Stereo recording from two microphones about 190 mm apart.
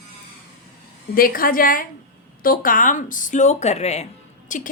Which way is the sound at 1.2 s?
50° left (ahead or behind).